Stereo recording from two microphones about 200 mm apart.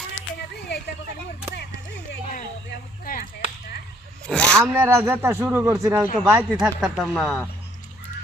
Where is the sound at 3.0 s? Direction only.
45° left (ahead or behind).